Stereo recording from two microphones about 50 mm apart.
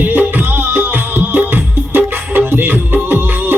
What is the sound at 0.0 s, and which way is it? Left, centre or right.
Music, right.